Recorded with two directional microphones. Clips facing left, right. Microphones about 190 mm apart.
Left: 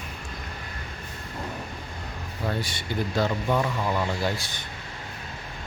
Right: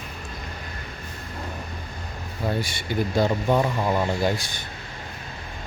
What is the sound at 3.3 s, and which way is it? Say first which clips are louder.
Speech: right 4 dB; 25° right (ahead or behind).